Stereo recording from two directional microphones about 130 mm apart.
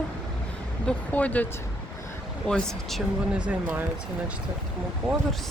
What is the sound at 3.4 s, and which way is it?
Speech, 10° right (ahead or behind).